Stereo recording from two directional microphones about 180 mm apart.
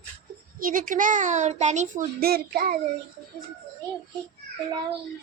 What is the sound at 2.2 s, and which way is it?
Child singing, 60° right (ahead or behind).